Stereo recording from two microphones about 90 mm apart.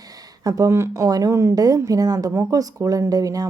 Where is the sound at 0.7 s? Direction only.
30° right (ahead or behind).